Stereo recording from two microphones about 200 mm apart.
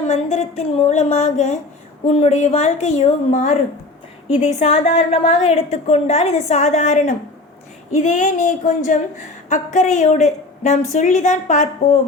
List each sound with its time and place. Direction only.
0.1 s a woman's voice: 35° left (ahead or behind)